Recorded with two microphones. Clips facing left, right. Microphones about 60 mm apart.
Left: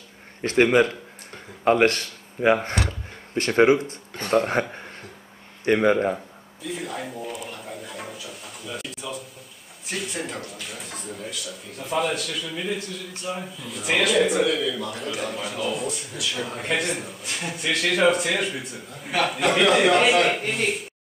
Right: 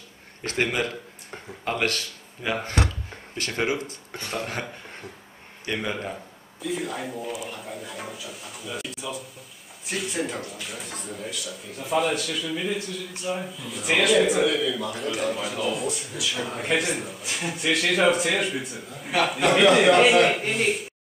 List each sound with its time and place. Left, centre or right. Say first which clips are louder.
0.4 s speech: left 8 dB; left
4.2 s speech: left 10 dB; left
5.7 s speech: left 10 dB; left
6.6 s a sound: right 2 dB; centre
9.8 s speech: right 2 dB; centre